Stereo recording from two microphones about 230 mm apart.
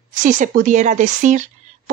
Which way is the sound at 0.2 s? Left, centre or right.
Right.